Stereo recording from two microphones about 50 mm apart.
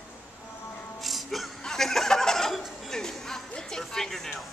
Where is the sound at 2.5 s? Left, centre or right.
Centre.